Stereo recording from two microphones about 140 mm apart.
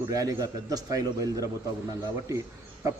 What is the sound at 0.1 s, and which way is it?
A man's voice, 25° right (ahead or behind).